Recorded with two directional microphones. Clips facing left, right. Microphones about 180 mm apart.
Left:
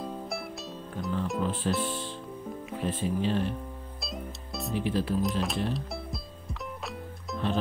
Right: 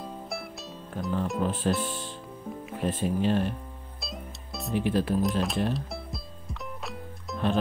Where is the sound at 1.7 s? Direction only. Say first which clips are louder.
Right 1 dB; centre (ahead or behind).